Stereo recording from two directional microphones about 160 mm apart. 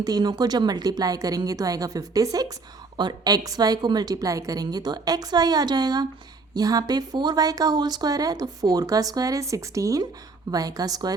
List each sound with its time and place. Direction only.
0.0 s speech: 25° right (ahead or behind)